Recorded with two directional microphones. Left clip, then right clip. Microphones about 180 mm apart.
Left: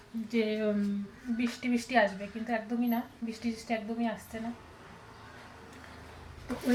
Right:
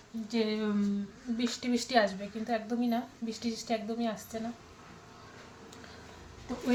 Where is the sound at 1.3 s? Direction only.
5° right (ahead or behind).